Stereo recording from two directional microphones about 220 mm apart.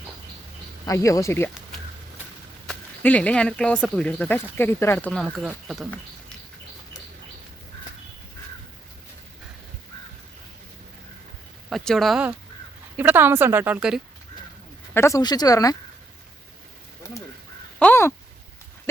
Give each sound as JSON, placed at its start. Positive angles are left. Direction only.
{"t": 0.9, "sound": "speech", "side_deg": 15}
{"t": 2.6, "sound": "speech", "side_deg": 5}
{"t": 11.7, "sound": "speech", "side_deg": 0}
{"t": 14.9, "sound": "speech", "side_deg": 15}
{"t": 17.0, "sound": "a sound", "side_deg": 15}
{"t": 17.7, "sound": "speech", "side_deg": 10}